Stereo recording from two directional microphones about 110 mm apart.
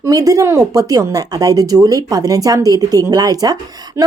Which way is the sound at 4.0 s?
25° right (ahead or behind).